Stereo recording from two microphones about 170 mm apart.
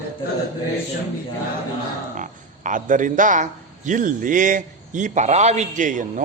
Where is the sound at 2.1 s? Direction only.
50° right (ahead or behind).